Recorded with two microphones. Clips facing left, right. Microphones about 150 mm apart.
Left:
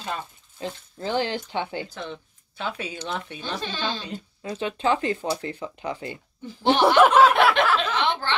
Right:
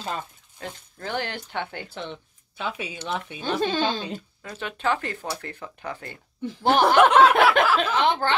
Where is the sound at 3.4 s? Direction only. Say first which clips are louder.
Right 10 dB; 50° right (ahead or behind).